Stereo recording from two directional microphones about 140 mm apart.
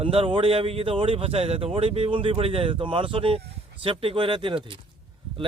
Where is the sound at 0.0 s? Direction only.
40° right (ahead or behind).